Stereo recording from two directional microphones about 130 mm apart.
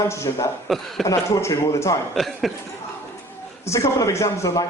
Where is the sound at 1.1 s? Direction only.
25° left (ahead or behind).